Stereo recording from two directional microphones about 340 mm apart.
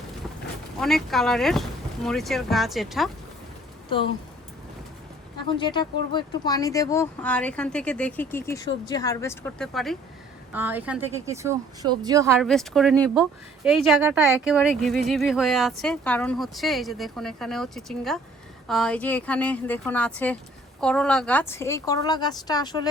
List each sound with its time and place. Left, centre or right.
0.8 s speech: centre
5.5 s speech: centre